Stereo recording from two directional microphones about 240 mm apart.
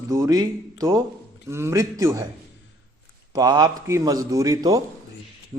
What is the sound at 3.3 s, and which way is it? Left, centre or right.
A man's voice, centre.